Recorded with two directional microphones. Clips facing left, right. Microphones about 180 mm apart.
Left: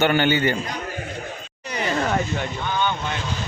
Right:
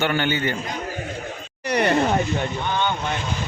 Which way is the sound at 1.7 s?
70° right (ahead or behind).